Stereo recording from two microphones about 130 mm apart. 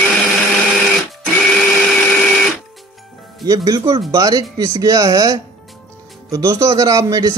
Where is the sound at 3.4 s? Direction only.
30° right (ahead or behind).